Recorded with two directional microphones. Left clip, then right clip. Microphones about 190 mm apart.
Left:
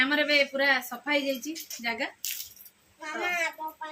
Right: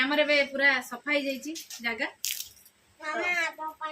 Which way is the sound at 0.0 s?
15° left (ahead or behind).